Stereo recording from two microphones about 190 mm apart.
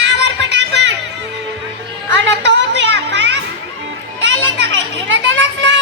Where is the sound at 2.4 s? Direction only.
65° right (ahead or behind).